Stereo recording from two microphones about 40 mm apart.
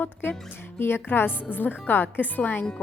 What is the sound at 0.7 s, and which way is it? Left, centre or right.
Speech, left.